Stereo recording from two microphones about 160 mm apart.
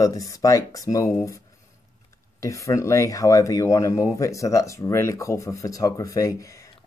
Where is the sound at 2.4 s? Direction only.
20° left (ahead or behind).